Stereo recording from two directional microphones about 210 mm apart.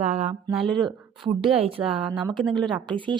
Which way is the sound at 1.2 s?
25° right (ahead or behind).